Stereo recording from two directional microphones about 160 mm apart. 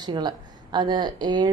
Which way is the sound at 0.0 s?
25° right (ahead or behind).